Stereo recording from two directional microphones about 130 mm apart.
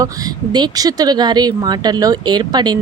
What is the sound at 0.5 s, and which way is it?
Speech, 30° right (ahead or behind).